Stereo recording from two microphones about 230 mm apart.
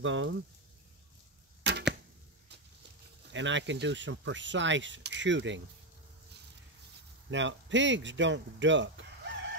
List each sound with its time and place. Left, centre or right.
0.0 s speech: right
1.6 s arrow: right
3.3 s speech: right
7.2 s speech: right